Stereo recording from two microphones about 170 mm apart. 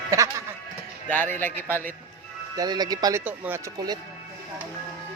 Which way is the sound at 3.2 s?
10° right (ahead or behind).